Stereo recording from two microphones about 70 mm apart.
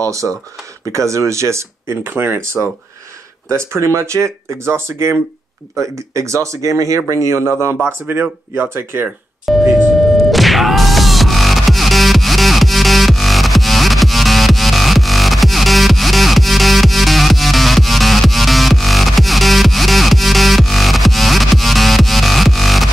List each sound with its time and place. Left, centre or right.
0.0 s speech: right
7.8 s speech: right
9.5 s music: centre